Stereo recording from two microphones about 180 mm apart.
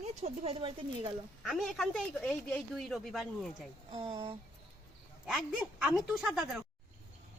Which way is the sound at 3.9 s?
20° right (ahead or behind).